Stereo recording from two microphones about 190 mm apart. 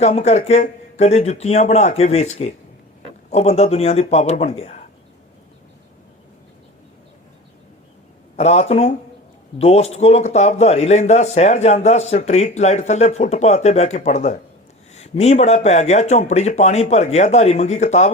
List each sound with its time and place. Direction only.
0.0 s speech: 35° left (ahead or behind)
8.4 s speech: 35° left (ahead or behind)